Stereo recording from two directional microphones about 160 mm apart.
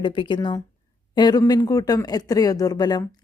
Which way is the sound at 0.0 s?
30° left (ahead or behind).